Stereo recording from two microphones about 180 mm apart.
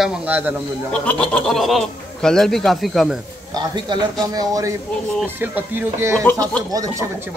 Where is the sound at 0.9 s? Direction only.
5° left (ahead or behind).